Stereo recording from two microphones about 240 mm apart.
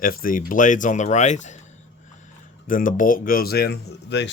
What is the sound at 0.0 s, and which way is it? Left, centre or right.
Speech, left.